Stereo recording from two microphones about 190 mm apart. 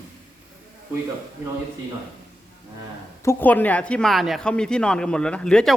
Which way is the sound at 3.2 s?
10° left (ahead or behind).